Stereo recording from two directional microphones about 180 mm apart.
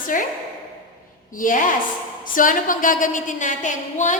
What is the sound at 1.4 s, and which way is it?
A woman's voice, 45° left (ahead or behind).